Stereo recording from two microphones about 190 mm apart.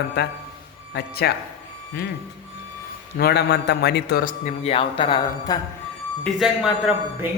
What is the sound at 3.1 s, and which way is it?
A man's voice, 55° left (ahead or behind).